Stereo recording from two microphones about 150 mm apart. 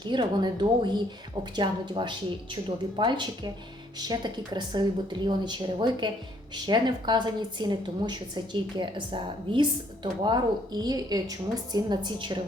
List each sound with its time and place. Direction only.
0.0 s a woman's voice: 30° right (ahead or behind)